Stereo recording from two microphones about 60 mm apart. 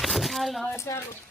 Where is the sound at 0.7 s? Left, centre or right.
Left.